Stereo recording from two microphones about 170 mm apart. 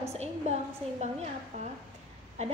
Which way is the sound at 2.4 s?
40° right (ahead or behind).